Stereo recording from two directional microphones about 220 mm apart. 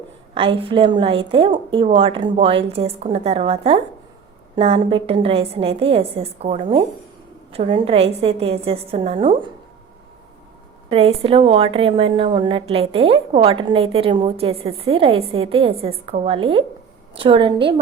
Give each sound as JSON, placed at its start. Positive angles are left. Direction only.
{"t": 0.3, "sound": "a woman's voice", "side_deg": -25}
{"t": 10.8, "sound": "a woman's voice", "side_deg": -25}